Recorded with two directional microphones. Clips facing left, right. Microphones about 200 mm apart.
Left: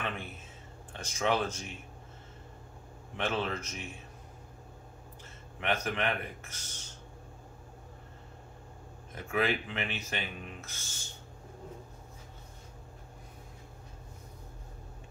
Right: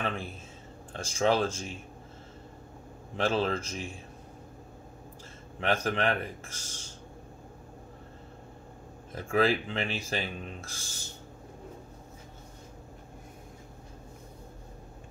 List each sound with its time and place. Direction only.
0.0 s speech: 30° right (ahead or behind)
3.2 s speech: 30° right (ahead or behind)
5.6 s speech: 30° right (ahead or behind)
9.1 s speech: 35° right (ahead or behind)